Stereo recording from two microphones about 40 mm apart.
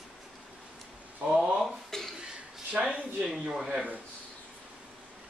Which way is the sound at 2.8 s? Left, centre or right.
Right.